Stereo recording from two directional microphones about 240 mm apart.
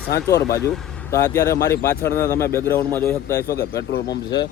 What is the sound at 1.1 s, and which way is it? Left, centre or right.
A man's voice, centre.